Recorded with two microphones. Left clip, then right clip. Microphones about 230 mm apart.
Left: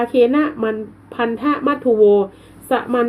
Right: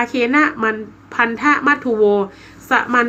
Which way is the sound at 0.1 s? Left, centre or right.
Right.